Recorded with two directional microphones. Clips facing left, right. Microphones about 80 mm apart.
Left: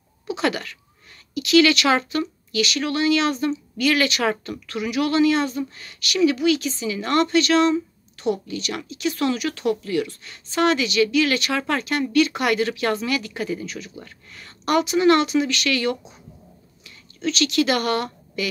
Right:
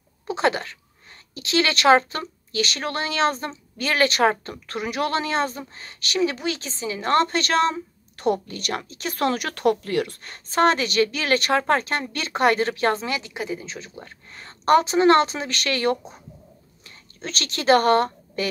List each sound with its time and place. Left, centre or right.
0.3 s speech: right